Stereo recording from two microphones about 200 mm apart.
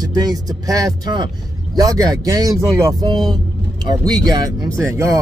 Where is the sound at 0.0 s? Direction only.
20° right (ahead or behind).